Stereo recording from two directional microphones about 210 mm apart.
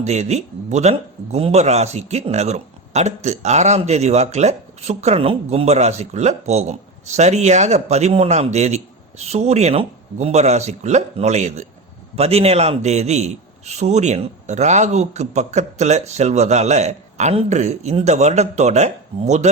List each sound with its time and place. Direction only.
0.0 s a man's voice: 35° right (ahead or behind)